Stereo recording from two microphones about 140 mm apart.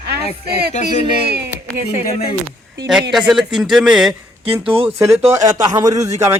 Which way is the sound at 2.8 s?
5° right (ahead or behind).